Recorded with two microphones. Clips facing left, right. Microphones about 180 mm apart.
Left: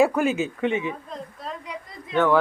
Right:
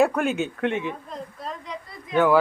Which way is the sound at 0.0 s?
Centre (ahead or behind).